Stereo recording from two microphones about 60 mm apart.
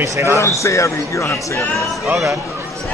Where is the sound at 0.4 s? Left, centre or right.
Left.